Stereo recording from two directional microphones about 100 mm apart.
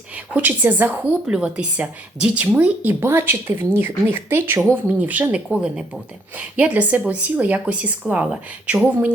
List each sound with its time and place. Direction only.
0.3 s speech: 15° right (ahead or behind)